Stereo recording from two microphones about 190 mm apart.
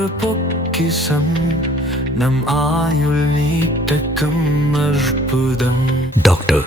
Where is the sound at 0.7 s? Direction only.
Centre (ahead or behind).